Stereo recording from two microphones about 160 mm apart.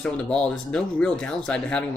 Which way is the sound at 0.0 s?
5° left (ahead or behind).